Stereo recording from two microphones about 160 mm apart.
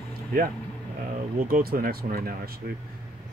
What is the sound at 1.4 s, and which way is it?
Speech, 60° right (ahead or behind).